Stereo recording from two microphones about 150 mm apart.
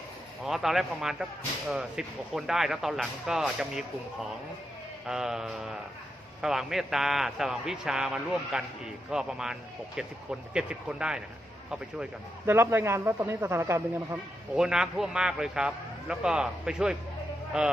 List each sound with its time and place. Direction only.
0.4 s a man's voice: centre (ahead or behind)
12.5 s speech: 15° right (ahead or behind)
14.5 s a man's voice: 5° right (ahead or behind)